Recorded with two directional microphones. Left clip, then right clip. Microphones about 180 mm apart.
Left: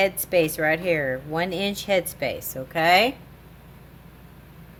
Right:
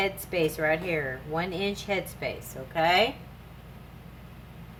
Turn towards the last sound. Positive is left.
turn(degrees=55)  # may be behind; listen again after turning